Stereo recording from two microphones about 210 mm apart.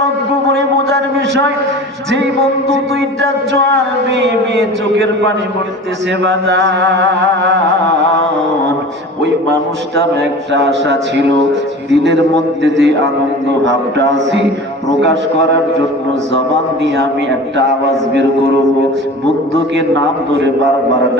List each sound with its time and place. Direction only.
2.7 s a man's voice: 55° right (ahead or behind)
12.6 s a man's voice: 60° right (ahead or behind)